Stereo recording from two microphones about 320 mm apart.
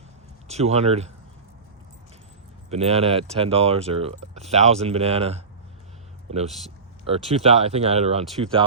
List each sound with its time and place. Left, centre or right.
0.4 s speech: centre
2.6 s speech: centre